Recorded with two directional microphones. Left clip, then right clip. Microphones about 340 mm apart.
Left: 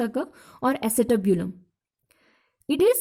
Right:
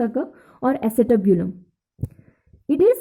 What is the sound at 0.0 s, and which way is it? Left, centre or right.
A woman's voice, left.